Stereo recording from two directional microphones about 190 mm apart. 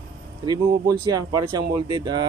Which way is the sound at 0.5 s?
20° right (ahead or behind).